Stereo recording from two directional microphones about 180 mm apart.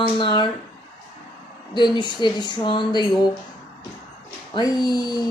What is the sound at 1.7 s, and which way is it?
A woman's voice, 25° left (ahead or behind).